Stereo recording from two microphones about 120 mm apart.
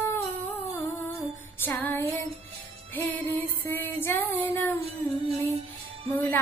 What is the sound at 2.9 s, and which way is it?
Music, 15° left (ahead or behind).